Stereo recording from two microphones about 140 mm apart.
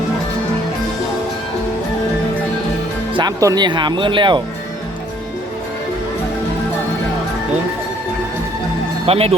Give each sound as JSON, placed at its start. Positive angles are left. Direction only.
{"t": 3.2, "sound": "speech", "side_deg": -30}
{"t": 9.0, "sound": "speech", "side_deg": -45}